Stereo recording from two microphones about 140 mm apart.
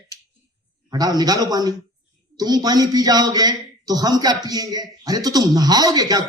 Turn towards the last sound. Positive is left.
turn(degrees=-25)  # may be behind; listen again after turning